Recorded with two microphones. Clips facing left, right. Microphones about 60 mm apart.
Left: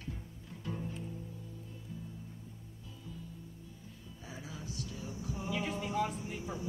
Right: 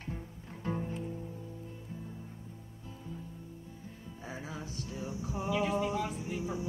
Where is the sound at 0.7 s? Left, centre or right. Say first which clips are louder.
Right 5 dB; right.